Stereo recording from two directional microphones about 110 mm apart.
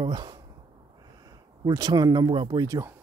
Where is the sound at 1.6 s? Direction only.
35° right (ahead or behind).